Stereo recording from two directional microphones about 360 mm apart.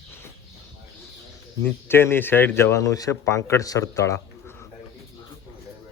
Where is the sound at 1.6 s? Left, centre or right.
Centre.